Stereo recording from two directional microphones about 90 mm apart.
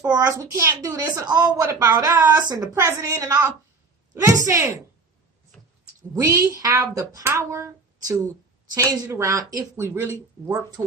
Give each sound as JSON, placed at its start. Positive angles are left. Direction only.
{"t": 0.1, "sound": "speech", "side_deg": -35}
{"t": 4.1, "sound": "speech", "side_deg": -30}
{"t": 6.1, "sound": "a woman's voice", "side_deg": -35}
{"t": 9.7, "sound": "speech", "side_deg": -30}